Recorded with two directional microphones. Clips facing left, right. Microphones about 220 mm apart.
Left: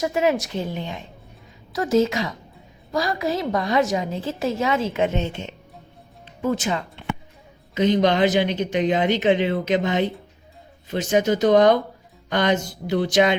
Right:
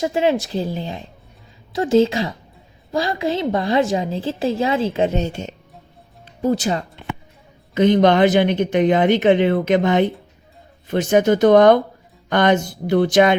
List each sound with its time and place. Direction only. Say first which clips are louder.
0.0 s a woman's voice: right 2 dB; 30° right (ahead or behind)
7.7 s speech: right 5 dB; 55° right (ahead or behind)